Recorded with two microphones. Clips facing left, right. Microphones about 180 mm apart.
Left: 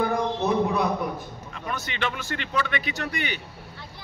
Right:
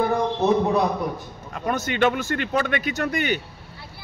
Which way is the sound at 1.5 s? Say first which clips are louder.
Right 9 dB; 45° right (ahead or behind).